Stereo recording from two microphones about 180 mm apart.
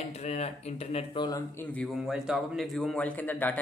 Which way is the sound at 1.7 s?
Centre (ahead or behind).